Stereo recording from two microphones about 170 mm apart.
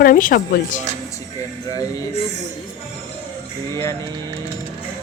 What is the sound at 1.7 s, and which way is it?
Speech, 20° left (ahead or behind).